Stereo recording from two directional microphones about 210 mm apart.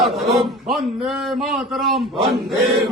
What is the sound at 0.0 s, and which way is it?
A man's voice, centre (ahead or behind).